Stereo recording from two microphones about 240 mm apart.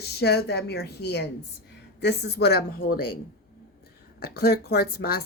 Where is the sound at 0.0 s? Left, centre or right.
Left.